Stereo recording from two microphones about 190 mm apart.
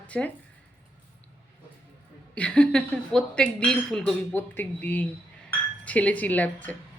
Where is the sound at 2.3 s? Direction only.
5° left (ahead or behind).